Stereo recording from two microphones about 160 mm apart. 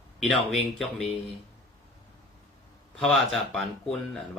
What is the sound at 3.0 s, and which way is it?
Speech, centre (ahead or behind).